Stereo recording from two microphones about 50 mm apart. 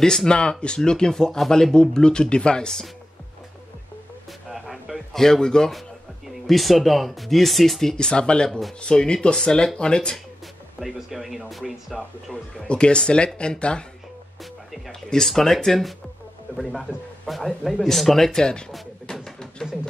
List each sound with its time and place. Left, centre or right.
0.0 s speech: centre
4.3 s a sound: centre
5.2 s speech: centre
5.7 s speech: centre
8.5 s speech: centre
8.8 s speech: centre
10.8 s speech: centre
12.5 s speech: centre
14.9 s speech: centre
19.2 s a sound: centre